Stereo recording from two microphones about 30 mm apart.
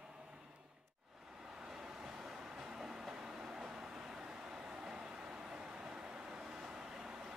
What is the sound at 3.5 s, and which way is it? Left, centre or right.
Vehicle, right.